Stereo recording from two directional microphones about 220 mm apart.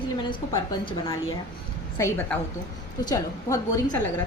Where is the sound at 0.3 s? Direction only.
20° left (ahead or behind).